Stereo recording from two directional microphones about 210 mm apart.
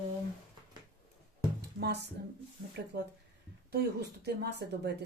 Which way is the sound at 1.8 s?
50° right (ahead or behind).